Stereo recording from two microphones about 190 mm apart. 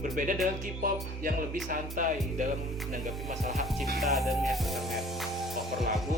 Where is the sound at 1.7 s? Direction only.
45° right (ahead or behind).